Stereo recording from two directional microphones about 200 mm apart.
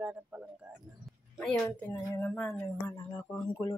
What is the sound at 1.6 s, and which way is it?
Speech, 10° left (ahead or behind).